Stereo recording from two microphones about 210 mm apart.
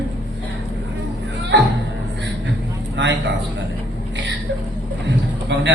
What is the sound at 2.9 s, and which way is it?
Speech, 60° right (ahead or behind).